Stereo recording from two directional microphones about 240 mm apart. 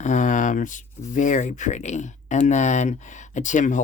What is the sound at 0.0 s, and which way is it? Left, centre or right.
Speech, left.